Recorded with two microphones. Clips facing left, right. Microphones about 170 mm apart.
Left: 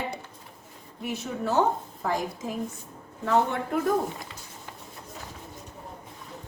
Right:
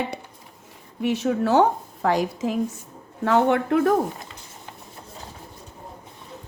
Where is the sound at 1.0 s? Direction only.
80° right.